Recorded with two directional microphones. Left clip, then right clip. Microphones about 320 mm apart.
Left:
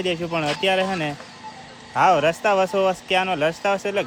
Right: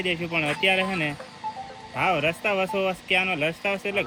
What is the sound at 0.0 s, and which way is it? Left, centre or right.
Speech, centre.